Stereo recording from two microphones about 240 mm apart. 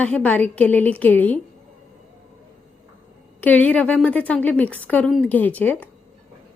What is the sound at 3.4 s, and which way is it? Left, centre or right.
A woman's voice, centre.